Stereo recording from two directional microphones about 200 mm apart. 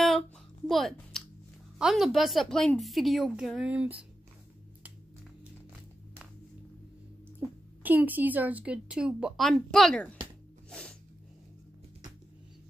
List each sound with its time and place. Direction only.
0.7 s a woman's voice: centre (ahead or behind)
7.3 s a woman's voice: 10° right (ahead or behind)
10.7 s a sound: 5° left (ahead or behind)